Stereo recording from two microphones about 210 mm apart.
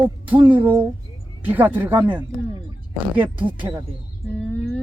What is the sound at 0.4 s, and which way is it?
Speech, 10° right (ahead or behind).